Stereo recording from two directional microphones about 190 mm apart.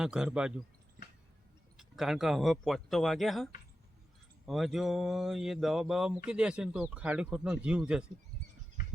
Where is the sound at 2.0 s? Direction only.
Centre (ahead or behind).